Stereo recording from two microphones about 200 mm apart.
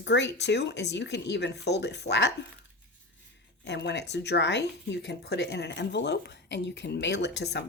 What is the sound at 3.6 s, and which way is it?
Speech, 60° left (ahead or behind).